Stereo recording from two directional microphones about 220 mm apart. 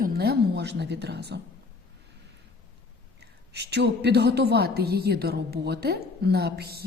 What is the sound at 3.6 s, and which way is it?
A woman's voice, 50° right (ahead or behind).